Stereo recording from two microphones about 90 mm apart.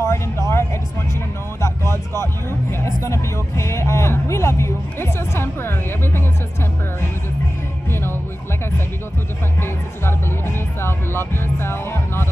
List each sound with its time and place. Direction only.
0.0 s music: 35° left (ahead or behind)
1.6 s a sound: 30° left (ahead or behind)
2.8 s speech: 30° left (ahead or behind)
7.9 s music: 25° left (ahead or behind)
9.6 s music: 25° left (ahead or behind)